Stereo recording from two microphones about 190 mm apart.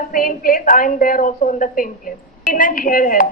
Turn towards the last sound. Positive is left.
turn(degrees=45)  # may be behind; listen again after turning